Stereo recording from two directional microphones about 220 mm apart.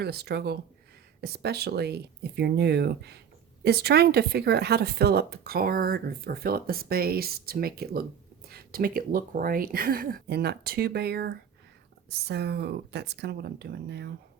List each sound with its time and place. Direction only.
0.0 s speech: 45° right (ahead or behind)